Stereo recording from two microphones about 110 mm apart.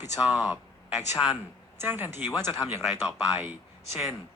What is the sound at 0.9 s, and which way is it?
Speech, centre (ahead or behind).